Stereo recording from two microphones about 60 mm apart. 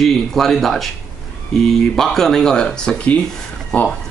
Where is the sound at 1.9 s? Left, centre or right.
Centre.